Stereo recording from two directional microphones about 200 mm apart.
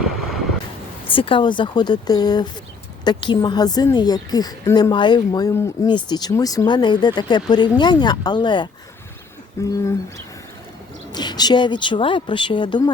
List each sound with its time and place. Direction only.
1.0 s a woman's voice: 25° left (ahead or behind)
11.1 s a woman's voice: 20° left (ahead or behind)